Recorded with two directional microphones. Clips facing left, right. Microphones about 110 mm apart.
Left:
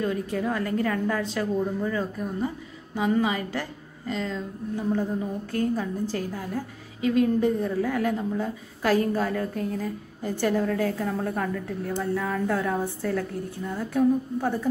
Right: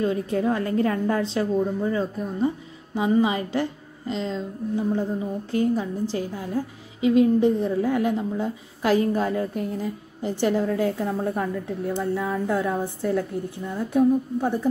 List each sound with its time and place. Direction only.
0.0 s a woman's voice: 25° right (ahead or behind)